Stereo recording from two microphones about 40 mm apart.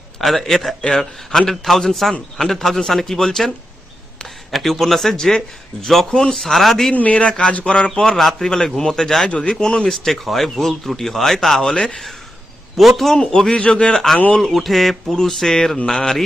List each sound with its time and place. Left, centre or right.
0.2 s speech: centre
4.5 s speech: centre
5.1 s speech: centre
6.9 s speech: left; by 9.3 s centre
9.3 s speech: left
10.1 s speech: centre
12.7 s speech: centre
13.1 s speech: centre
13.9 s speech: centre